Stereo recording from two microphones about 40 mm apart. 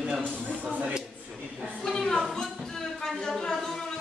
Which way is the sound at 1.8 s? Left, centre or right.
Centre.